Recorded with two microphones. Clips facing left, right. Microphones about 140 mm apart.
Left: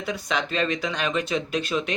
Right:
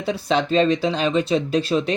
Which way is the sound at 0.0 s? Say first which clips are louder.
Right 6 dB; 30° right (ahead or behind).